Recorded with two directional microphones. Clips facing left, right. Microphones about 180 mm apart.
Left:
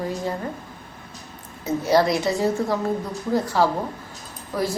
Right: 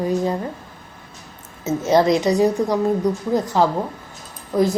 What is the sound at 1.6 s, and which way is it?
Speech, 20° right (ahead or behind).